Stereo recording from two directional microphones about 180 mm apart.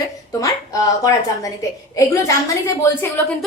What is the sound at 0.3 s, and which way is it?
A woman's voice, 20° left (ahead or behind).